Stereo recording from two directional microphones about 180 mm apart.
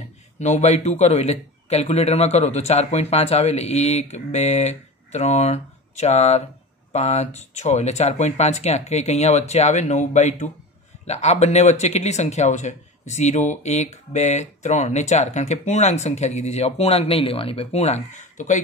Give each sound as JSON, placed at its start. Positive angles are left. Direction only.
{"t": 0.4, "sound": "speech", "side_deg": 40}